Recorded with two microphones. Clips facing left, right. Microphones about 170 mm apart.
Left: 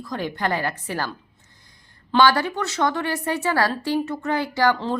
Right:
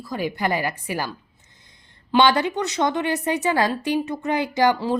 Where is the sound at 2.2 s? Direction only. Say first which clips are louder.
Even; 20° right (ahead or behind).